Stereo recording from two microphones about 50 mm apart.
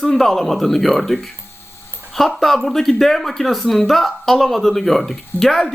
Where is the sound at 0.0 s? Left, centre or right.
Centre.